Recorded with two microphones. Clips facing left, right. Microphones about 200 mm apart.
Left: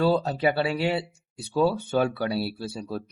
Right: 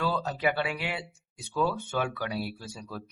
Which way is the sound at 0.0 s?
30° left (ahead or behind).